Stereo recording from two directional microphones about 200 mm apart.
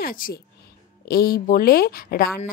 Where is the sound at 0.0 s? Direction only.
45° left (ahead or behind).